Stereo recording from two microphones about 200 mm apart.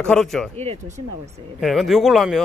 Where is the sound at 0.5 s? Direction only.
35° right (ahead or behind).